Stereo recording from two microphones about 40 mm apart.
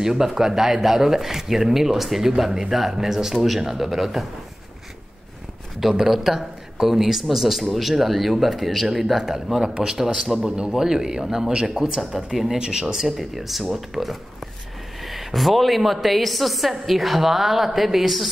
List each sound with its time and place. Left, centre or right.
0.0 s speech: centre
5.9 s a woman's voice: centre